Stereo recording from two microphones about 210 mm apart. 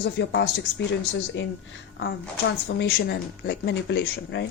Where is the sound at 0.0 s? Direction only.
55° left (ahead or behind).